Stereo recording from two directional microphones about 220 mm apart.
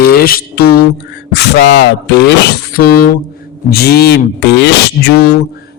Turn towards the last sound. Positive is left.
turn(degrees=45)  # may be behind; listen again after turning